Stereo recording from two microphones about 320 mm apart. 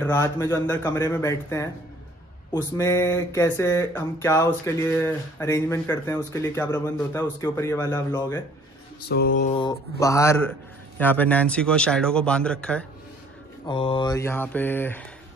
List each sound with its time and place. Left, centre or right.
0.0 s speech: centre
9.1 s mantra: left
9.5 s speech: centre
13.7 s speech: centre